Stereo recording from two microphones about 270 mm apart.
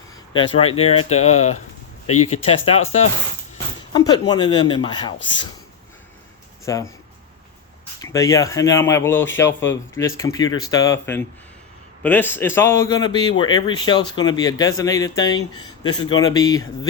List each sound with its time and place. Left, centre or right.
0.3 s speech: centre
4.3 s speech: centre
6.7 s speech: centre
7.9 s speech: centre